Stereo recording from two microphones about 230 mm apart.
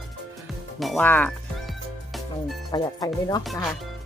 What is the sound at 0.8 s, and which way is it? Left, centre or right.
Speech, centre.